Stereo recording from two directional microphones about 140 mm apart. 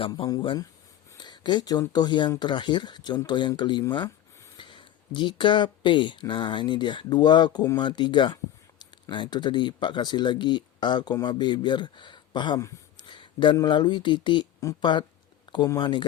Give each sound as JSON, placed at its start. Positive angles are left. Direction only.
{"t": 0.0, "sound": "speech", "side_deg": 40}
{"t": 1.2, "sound": "a sound", "side_deg": 30}
{"t": 1.9, "sound": "speech", "side_deg": 30}